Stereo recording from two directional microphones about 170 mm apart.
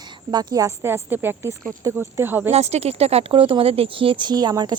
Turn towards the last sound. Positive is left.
turn(degrees=-25)  # may be behind; listen again after turning